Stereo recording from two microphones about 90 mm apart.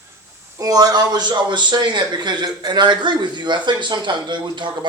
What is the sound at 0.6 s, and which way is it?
A man's voice, 45° right (ahead or behind).